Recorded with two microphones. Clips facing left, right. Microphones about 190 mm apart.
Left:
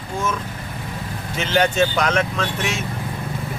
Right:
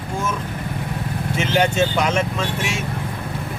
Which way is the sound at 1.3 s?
5° right (ahead or behind).